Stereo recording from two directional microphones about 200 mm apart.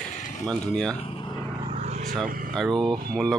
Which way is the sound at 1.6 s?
35° right (ahead or behind).